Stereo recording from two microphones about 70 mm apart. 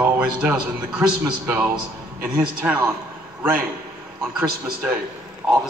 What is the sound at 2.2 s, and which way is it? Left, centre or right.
Speech, right.